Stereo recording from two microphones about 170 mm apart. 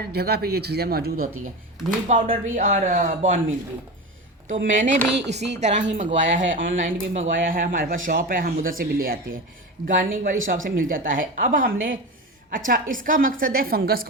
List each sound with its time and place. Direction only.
0.1 s a woman's voice: 70° right (ahead or behind); by 3.4 s 50° right (ahead or behind)
4.6 s a woman's voice: 50° right (ahead or behind)